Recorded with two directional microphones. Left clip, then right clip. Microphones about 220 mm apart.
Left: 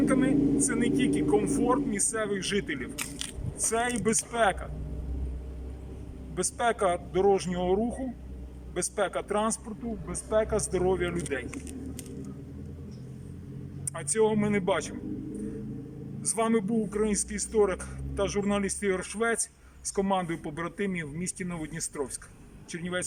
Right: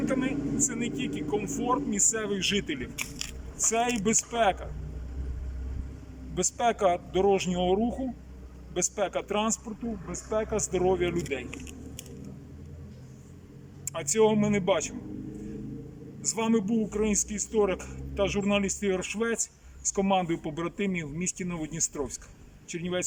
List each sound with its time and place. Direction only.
0.0 s a man's voice: 5° right (ahead or behind)
6.3 s speech: 5° right (ahead or behind)
13.9 s speech: 5° right (ahead or behind)
16.2 s a man's voice: 5° right (ahead or behind)